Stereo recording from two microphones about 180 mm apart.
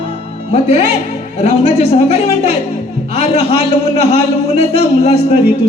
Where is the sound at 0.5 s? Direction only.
35° left (ahead or behind).